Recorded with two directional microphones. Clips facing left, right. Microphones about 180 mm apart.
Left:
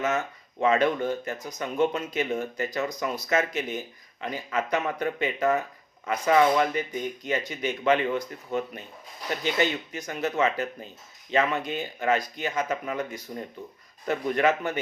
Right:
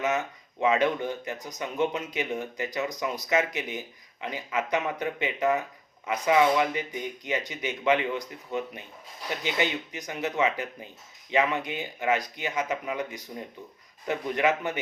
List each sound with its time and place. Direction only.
0.0 s speech: 15° right (ahead or behind)